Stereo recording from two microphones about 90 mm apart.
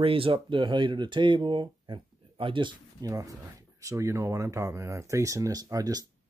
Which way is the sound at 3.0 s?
40° right (ahead or behind).